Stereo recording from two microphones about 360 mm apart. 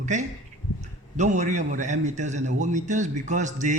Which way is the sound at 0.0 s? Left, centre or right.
Centre.